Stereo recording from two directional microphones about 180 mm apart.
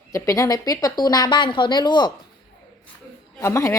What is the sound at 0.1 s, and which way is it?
A woman's voice, 20° left (ahead or behind).